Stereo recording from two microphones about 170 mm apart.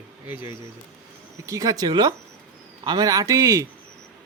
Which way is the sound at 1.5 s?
20° right (ahead or behind).